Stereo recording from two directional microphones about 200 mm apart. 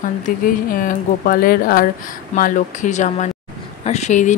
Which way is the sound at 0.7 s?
45° left (ahead or behind).